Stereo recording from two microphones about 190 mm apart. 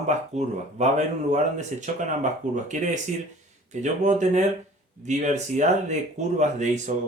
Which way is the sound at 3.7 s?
40° right (ahead or behind).